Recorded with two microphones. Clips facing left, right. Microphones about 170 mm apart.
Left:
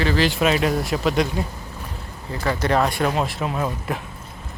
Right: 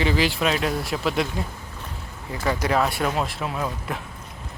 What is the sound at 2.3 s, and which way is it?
Speech, 15° right (ahead or behind).